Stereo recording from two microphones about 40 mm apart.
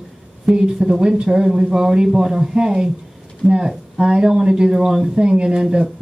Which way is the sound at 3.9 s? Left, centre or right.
Centre.